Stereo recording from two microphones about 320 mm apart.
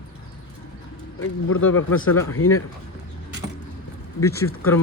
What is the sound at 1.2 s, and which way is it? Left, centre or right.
Speech, left.